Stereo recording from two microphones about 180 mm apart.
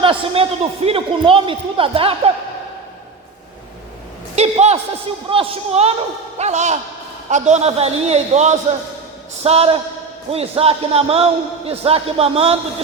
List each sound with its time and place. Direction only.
0.0 s a man's voice: 30° right (ahead or behind)
4.4 s a man's voice: 35° right (ahead or behind)